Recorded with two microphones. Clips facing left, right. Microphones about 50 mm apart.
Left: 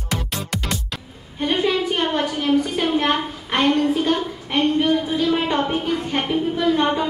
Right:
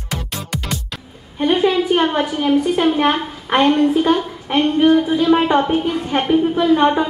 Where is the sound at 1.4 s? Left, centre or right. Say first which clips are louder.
Right 5 dB; right.